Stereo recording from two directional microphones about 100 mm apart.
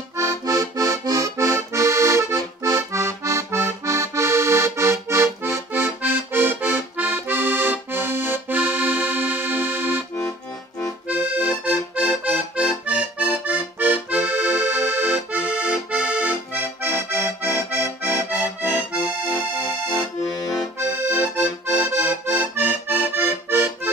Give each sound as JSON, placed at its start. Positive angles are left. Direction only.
{"t": 0.2, "sound": "music", "side_deg": -35}
{"t": 11.1, "sound": "accordion", "side_deg": -15}
{"t": 20.2, "sound": "accordion", "side_deg": 35}
{"t": 21.0, "sound": "accordion", "side_deg": -20}